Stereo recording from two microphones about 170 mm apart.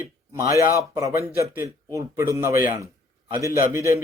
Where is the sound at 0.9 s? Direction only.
15° right (ahead or behind).